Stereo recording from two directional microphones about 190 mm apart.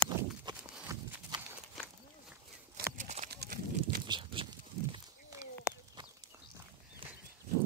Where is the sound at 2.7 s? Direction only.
40° right (ahead or behind).